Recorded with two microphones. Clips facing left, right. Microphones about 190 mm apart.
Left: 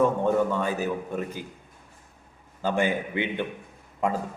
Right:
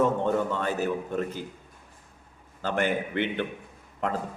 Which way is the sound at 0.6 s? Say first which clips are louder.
Even; 10° left (ahead or behind).